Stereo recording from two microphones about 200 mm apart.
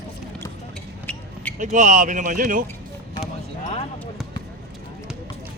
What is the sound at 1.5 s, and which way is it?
Speech, 40° right (ahead or behind).